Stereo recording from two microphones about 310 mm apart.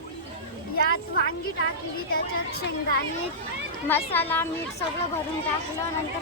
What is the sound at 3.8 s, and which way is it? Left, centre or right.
Speech, centre.